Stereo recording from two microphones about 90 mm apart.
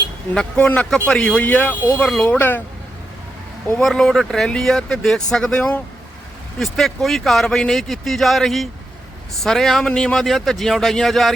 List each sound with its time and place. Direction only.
0.3 s a man's voice: 10° left (ahead or behind)
3.8 s speech: 5° left (ahead or behind)